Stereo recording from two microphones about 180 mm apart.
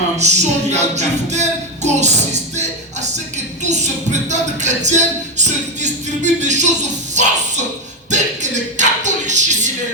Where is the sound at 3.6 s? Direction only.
40° right (ahead or behind).